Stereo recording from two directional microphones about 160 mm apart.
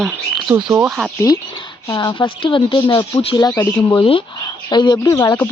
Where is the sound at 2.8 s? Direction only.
20° left (ahead or behind).